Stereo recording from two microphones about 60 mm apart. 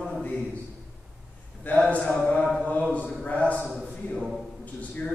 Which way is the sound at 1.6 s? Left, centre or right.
Left.